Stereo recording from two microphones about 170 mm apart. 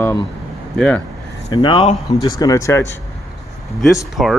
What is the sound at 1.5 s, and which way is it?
Speech, 25° left (ahead or behind).